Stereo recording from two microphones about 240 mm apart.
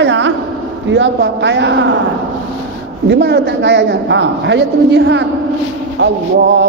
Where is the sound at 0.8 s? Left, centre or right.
Right.